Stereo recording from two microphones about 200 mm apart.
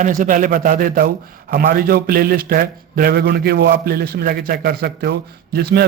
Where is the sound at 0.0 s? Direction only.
40° right (ahead or behind).